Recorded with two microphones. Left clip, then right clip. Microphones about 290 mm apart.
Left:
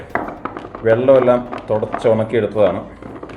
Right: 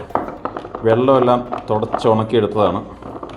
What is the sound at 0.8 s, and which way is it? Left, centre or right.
Speech, right.